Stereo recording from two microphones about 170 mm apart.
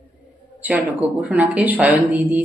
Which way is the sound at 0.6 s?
10° right (ahead or behind).